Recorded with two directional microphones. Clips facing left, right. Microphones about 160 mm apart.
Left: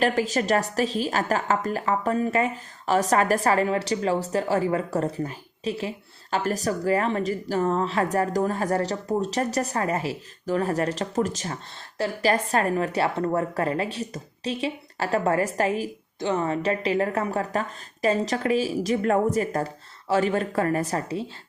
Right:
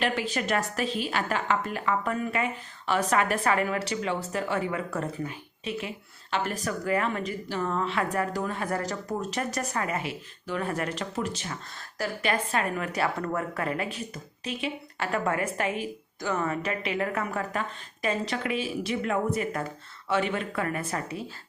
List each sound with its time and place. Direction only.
0.0 s a woman's voice: 40° left (ahead or behind)